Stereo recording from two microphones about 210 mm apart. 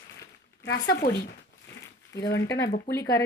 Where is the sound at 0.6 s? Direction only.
55° left (ahead or behind).